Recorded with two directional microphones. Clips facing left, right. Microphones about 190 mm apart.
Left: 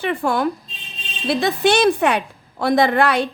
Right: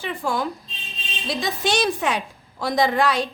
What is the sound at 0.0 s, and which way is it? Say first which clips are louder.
A woman's voice: left 6 dB; 60° left (ahead or behind).